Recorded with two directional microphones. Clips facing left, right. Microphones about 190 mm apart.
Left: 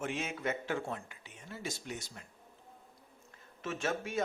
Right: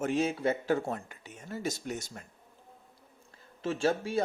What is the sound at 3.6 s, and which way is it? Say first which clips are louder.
Speech: right 7 dB; 30° right (ahead or behind).